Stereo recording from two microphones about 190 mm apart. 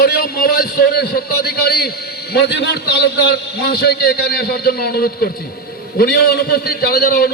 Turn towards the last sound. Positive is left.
turn(degrees=55)  # may be behind; listen again after turning